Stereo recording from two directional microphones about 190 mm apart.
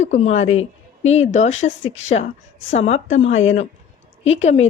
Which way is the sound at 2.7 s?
35° left (ahead or behind).